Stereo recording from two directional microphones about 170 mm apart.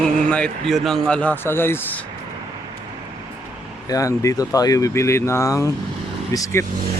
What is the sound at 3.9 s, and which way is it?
A man's voice, 20° left (ahead or behind).